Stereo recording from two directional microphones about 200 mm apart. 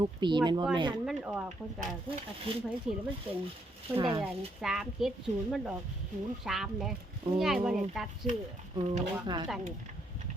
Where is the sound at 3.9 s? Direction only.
25° right (ahead or behind).